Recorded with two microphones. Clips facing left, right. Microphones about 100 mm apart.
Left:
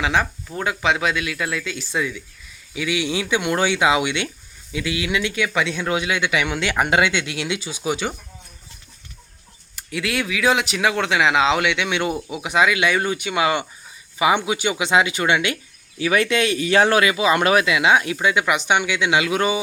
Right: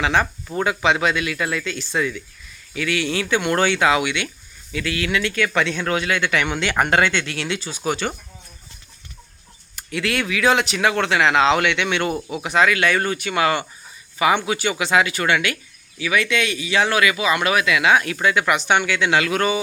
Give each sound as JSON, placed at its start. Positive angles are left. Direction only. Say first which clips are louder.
{"t": 0.0, "sound": "speech", "louder": "right 1 dB", "side_deg": 0}
{"t": 9.7, "sound": "speech", "louder": "right 1 dB", "side_deg": 5}
{"t": 16.0, "sound": "speech", "louder": "left 2 dB", "side_deg": 35}
{"t": 17.7, "sound": "speech", "louder": "even", "side_deg": 20}